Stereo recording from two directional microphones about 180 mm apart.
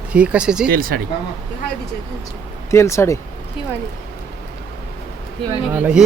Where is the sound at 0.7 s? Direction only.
50° right (ahead or behind).